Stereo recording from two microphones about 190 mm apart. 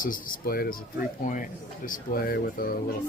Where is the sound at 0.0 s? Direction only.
50° left (ahead or behind).